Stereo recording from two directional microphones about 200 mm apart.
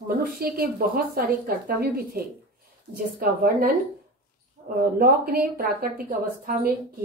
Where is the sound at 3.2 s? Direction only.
45° right (ahead or behind).